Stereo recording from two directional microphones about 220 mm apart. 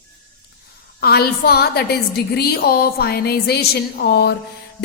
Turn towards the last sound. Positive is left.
turn(degrees=45)  # may be behind; listen again after turning